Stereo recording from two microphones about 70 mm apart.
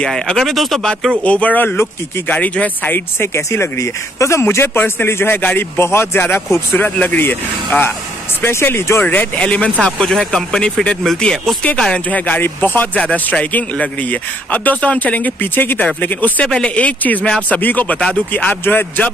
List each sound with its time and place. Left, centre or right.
0.0 s speech: centre
1.2 s speech: centre
3.2 s a man's voice: left
9.0 s speech: left
9.8 s speech: centre; by 13.0 s left
13.0 s speech: centre
16.4 s speech: centre